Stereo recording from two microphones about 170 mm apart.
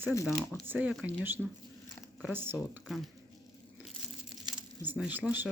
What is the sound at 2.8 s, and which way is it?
Speech, centre (ahead or behind).